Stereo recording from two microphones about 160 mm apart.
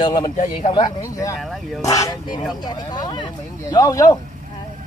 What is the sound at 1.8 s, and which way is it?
Speech, 20° left (ahead or behind).